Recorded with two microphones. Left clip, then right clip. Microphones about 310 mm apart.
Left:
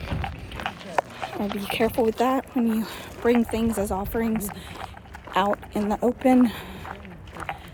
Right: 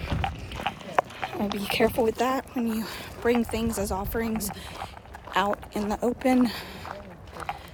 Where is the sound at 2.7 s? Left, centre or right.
Centre.